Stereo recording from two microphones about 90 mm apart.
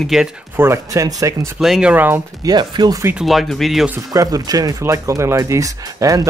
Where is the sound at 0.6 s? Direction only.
35° right (ahead or behind).